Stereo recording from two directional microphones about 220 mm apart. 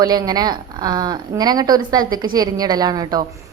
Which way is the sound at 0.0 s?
15° right (ahead or behind).